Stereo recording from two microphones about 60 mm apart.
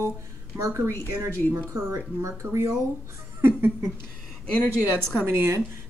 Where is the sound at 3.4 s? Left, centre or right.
Right.